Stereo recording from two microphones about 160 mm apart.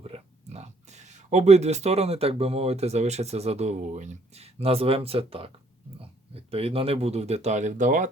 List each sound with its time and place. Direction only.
0.0 s speech: 40° right (ahead or behind)